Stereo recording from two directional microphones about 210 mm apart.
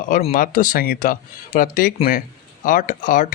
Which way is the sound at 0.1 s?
40° left (ahead or behind).